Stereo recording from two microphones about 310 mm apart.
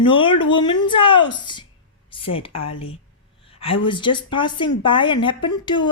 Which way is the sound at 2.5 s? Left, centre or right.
Left.